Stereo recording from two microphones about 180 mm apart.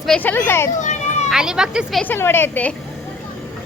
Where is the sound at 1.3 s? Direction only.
5° right (ahead or behind).